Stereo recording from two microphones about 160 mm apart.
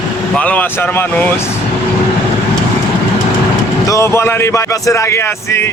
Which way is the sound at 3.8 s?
20° left (ahead or behind).